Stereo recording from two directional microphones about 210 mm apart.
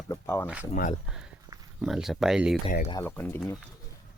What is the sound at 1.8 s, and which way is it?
Speech, centre (ahead or behind).